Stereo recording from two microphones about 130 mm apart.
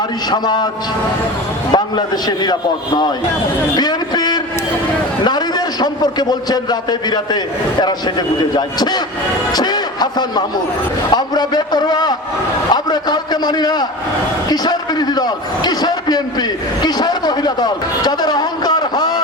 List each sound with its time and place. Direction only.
0.3 s a man's voice: 35° left (ahead or behind)
1.7 s a man's voice: 35° left (ahead or behind)